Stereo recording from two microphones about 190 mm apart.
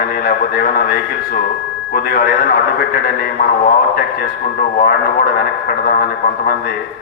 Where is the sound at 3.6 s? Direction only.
50° left (ahead or behind).